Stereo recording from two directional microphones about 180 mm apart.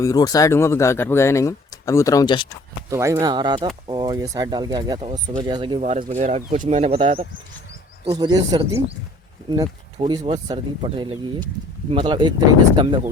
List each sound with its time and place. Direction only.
0.0 s speech: 20° left (ahead or behind)
2.9 s speech: 15° right (ahead or behind)
5.8 s speech: 40° right (ahead or behind)